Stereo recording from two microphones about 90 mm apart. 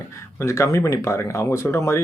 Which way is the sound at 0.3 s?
35° left (ahead or behind).